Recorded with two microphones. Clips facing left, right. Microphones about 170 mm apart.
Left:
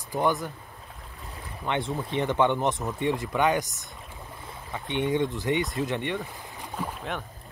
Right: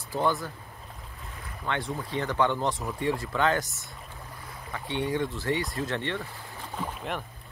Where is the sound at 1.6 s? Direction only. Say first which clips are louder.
Left 3 dB; 20° left (ahead or behind).